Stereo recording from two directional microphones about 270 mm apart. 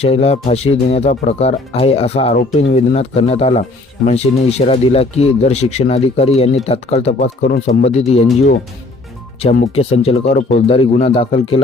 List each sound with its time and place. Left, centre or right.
0.0 s speech: left
9.4 s speech: left